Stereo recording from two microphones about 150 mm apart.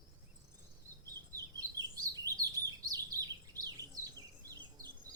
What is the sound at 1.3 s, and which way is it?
Chirp, 25° right (ahead or behind).